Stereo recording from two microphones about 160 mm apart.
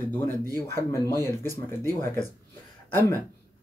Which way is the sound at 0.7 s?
15° left (ahead or behind).